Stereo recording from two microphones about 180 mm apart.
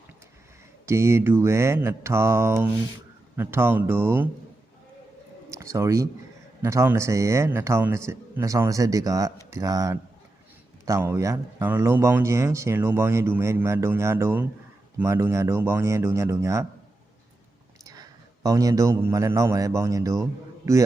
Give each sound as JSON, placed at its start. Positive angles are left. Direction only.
{"t": 0.9, "sound": "speech", "side_deg": -15}
{"t": 5.5, "sound": "speech", "side_deg": -15}
{"t": 17.8, "sound": "a man's voice", "side_deg": -20}